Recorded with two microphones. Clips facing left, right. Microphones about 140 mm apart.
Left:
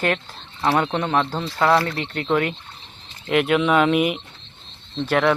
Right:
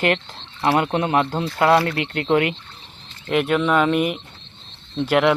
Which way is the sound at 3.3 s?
Centre (ahead or behind).